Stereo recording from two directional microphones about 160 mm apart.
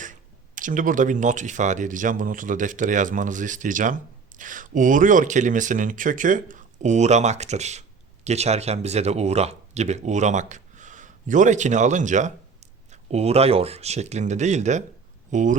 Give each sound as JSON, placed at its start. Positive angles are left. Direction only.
{"t": 0.0, "sound": "speech", "side_deg": -55}